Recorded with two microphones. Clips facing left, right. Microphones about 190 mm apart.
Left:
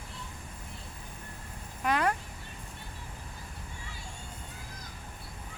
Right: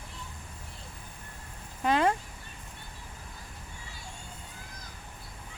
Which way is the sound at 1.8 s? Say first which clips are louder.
Right 3 dB; 25° right (ahead or behind).